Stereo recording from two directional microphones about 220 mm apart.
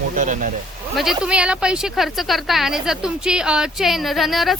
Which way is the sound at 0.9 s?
Centre (ahead or behind).